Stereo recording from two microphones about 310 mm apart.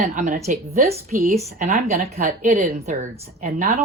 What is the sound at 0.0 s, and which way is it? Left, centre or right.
A woman's voice, right.